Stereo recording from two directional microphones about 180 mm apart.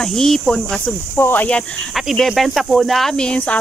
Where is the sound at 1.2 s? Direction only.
10° left (ahead or behind).